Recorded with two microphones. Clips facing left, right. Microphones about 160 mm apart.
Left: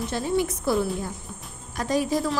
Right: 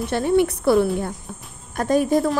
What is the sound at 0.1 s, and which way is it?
A woman's voice, 65° right (ahead or behind).